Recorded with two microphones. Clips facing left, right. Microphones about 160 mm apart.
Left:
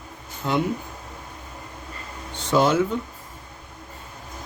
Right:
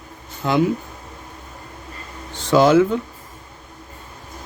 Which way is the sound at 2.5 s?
90° right.